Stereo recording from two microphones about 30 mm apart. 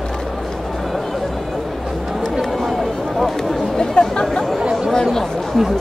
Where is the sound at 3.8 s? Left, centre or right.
Left.